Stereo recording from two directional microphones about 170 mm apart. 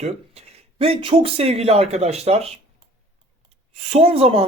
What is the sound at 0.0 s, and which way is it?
Speech, 35° right (ahead or behind).